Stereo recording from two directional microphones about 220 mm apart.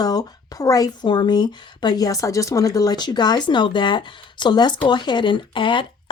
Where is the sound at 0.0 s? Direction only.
15° left (ahead or behind).